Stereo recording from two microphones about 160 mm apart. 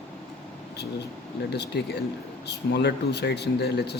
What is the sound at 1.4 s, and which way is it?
Speech, 90° left.